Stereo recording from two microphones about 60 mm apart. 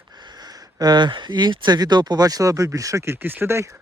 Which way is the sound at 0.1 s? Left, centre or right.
Right.